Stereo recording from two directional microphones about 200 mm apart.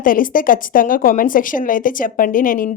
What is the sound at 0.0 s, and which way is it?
A woman's voice, 45° left (ahead or behind).